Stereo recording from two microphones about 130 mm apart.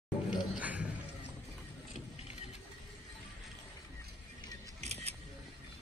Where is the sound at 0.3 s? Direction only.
10° right (ahead or behind).